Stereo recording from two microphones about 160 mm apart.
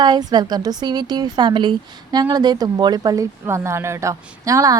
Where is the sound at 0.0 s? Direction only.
25° right (ahead or behind).